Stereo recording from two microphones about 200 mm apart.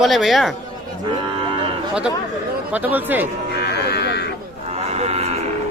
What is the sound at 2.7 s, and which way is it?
Speech, 10° right (ahead or behind).